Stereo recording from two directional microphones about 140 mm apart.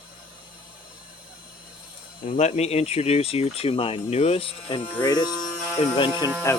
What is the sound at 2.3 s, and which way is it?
Speech, 55° left (ahead or behind).